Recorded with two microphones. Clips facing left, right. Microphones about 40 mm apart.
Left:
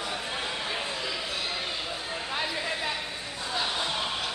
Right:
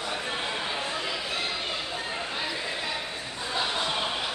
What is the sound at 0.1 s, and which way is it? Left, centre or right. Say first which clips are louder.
Chatter: right 2 dB; centre.